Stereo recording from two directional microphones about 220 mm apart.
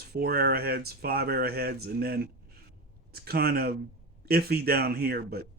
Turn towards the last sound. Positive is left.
turn(degrees=-45)  # may be behind; listen again after turning